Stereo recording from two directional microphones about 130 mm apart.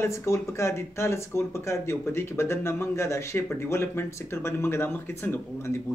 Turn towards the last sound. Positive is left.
turn(degrees=15)  # may be behind; listen again after turning